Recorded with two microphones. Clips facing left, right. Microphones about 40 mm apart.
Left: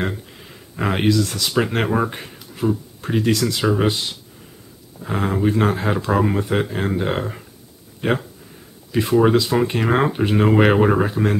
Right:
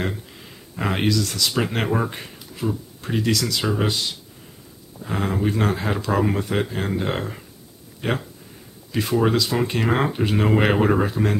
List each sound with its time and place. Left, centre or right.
0.0 s a sound: centre
1.0 s speech: centre
3.5 s speech: centre
8.0 s speech: centre